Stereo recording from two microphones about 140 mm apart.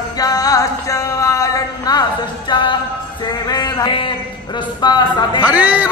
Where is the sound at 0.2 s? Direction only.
25° left (ahead or behind).